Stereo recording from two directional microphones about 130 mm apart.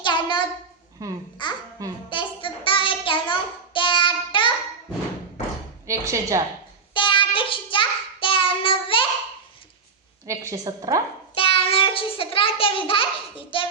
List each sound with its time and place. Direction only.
0.0 s a sound: 35° left (ahead or behind)
1.0 s a woman's voice: 25° right (ahead or behind)
1.4 s a child's voice: 35° left (ahead or behind)
2.0 s child singing: 40° left (ahead or behind)
5.9 s a sound: 25° right (ahead or behind)
6.9 s child singing: 40° left (ahead or behind)
10.2 s a woman's voice: 25° right (ahead or behind)
11.3 s child singing: 45° left (ahead or behind)